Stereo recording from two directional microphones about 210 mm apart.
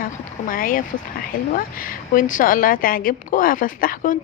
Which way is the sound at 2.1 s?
40° left (ahead or behind).